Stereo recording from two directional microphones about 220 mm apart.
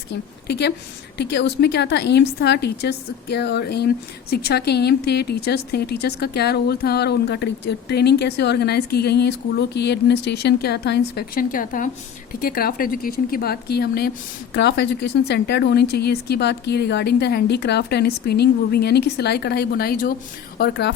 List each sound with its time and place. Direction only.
0.4 s a woman's voice: 50° left (ahead or behind)